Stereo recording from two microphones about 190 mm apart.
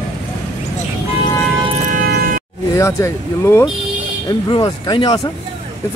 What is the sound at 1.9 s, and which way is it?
Music, 50° right (ahead or behind).